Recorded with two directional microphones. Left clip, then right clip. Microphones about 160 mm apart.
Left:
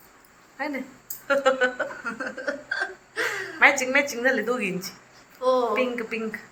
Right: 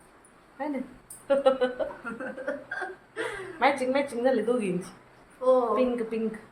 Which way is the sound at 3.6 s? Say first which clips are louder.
Left 5 dB; 15° right (ahead or behind).